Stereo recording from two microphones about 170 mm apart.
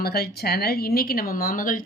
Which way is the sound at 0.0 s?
70° left (ahead or behind).